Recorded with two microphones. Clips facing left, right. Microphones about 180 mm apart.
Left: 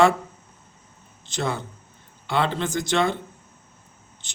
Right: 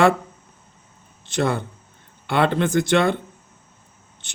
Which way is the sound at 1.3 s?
55° right (ahead or behind).